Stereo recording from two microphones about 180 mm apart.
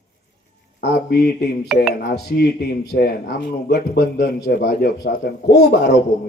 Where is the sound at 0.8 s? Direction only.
65° left (ahead or behind).